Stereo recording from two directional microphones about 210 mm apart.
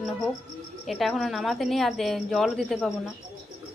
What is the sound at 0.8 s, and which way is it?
Speech, centre (ahead or behind).